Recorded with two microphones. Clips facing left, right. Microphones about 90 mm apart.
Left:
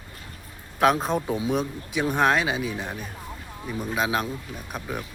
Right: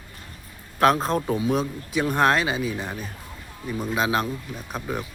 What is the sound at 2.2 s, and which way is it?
Speech, 5° left (ahead or behind).